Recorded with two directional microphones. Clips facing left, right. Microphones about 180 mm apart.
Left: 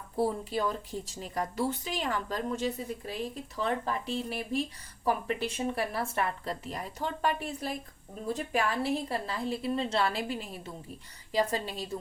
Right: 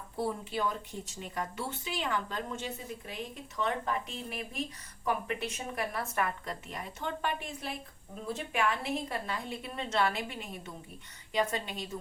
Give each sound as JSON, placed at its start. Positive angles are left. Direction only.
{"t": 0.2, "sound": "speech", "side_deg": 35}